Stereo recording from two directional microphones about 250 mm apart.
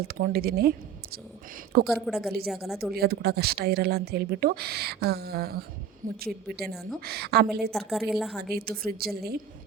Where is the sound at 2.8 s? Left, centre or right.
Right.